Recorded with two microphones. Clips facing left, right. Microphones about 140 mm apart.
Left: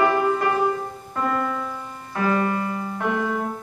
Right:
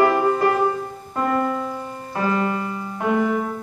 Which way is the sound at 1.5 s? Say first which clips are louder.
Right 3 dB; 30° right (ahead or behind).